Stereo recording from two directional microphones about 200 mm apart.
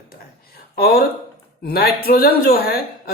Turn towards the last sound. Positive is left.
turn(degrees=50)  # may be behind; listen again after turning